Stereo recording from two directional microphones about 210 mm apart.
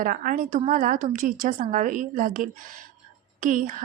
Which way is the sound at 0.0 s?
40° right (ahead or behind).